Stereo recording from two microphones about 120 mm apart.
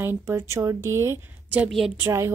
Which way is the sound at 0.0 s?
20° right (ahead or behind).